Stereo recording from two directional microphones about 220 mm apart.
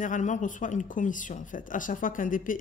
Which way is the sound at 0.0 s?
35° left (ahead or behind).